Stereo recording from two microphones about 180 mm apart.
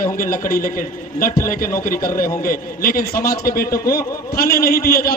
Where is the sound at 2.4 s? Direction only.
50° left (ahead or behind).